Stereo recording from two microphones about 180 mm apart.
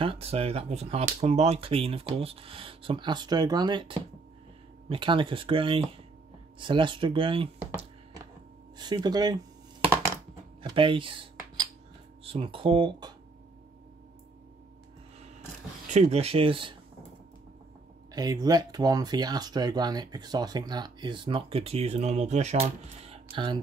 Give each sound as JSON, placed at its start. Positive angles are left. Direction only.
{"t": 0.0, "sound": "speech", "side_deg": -30}
{"t": 8.7, "sound": "speech", "side_deg": -25}
{"t": 10.6, "sound": "a sound", "side_deg": -30}
{"t": 12.3, "sound": "speech", "side_deg": -30}
{"t": 15.9, "sound": "speech", "side_deg": -40}
{"t": 18.1, "sound": "speech", "side_deg": -20}